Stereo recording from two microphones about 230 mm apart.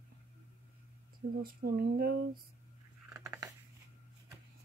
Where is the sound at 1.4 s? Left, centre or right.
Right.